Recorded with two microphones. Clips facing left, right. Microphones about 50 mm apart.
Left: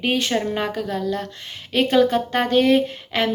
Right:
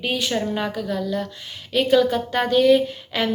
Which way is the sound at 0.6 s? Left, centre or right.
Left.